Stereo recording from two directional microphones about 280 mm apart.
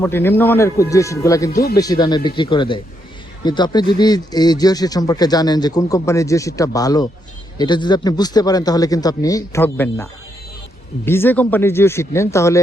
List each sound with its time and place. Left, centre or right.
0.0 s speech: centre